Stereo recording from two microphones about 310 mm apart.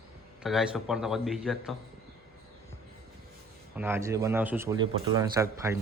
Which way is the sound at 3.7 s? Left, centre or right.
Centre.